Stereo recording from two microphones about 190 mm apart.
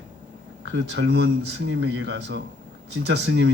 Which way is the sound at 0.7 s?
70° right (ahead or behind).